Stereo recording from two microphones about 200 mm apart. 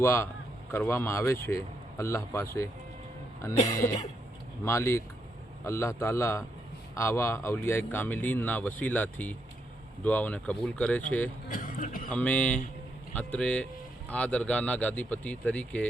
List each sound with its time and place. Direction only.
0.0 s speech: 15° left (ahead or behind)
3.7 s speech: 15° left (ahead or behind)
11.4 s speech: 40° left (ahead or behind)
12.0 s speech: 5° left (ahead or behind)